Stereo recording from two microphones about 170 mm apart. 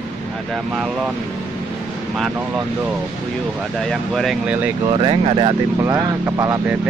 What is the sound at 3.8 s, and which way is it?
Speech, centre (ahead or behind).